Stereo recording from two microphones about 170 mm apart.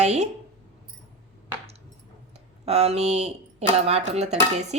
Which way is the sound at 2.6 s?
35° right (ahead or behind).